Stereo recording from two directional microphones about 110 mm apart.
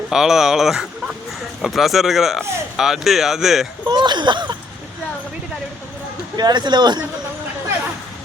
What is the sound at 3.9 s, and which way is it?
Speech, 40° right (ahead or behind).